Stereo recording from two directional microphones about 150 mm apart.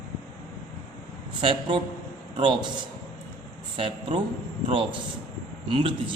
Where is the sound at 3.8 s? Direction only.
35° right (ahead or behind).